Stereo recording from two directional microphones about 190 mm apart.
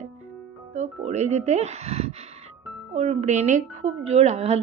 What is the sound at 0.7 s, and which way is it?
A woman's voice, 35° right (ahead or behind).